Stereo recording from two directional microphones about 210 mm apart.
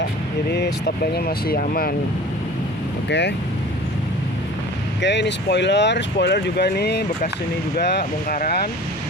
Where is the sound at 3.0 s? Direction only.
55° left (ahead or behind).